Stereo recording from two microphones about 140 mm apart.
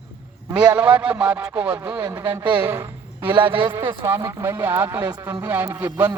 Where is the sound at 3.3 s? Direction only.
35° right (ahead or behind).